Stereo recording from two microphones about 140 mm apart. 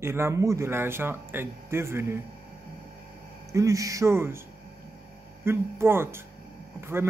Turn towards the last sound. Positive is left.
turn(degrees=-15)  # may be behind; listen again after turning